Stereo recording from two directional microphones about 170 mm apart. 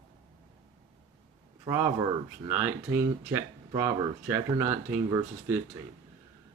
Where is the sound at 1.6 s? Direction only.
15° right (ahead or behind).